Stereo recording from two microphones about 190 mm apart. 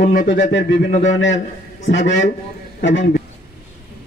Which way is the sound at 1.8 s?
70° left (ahead or behind).